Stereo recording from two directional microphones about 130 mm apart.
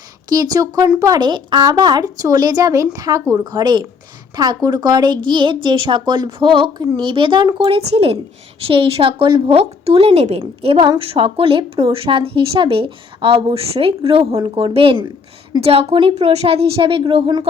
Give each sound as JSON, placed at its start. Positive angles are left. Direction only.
{"t": 0.3, "sound": "a woman's voice", "side_deg": -30}
{"t": 9.6, "sound": "a woman's voice", "side_deg": -50}